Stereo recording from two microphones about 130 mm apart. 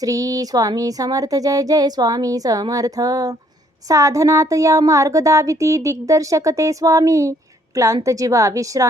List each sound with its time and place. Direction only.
0.0 s speech: 25° right (ahead or behind)